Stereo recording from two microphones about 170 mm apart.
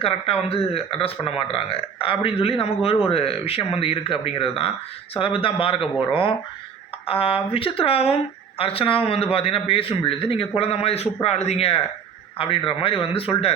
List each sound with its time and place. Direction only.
0.0 s speech: 35° left (ahead or behind)